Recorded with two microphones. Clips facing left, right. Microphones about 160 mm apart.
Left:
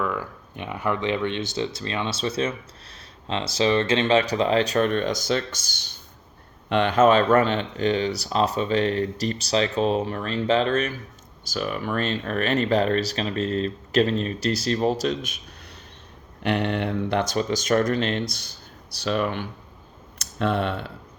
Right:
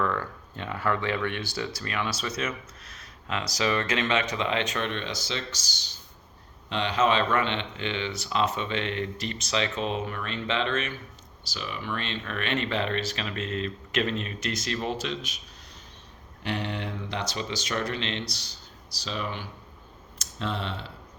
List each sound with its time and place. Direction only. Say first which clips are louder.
0.0 s speech: left 1 dB; 10° left (ahead or behind); by 15.4 s 45° left (ahead or behind)
16.4 s speech: left 8 dB; 60° left (ahead or behind)